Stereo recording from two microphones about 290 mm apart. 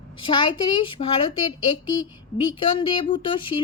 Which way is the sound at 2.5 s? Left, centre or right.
Centre.